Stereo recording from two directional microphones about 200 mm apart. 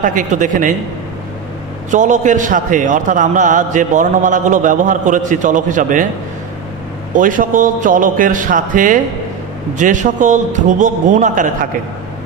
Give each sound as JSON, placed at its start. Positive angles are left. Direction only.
{"t": 0.0, "sound": "a man's voice", "side_deg": -40}
{"t": 1.9, "sound": "a man's voice", "side_deg": -40}
{"t": 7.2, "sound": "a man's voice", "side_deg": -40}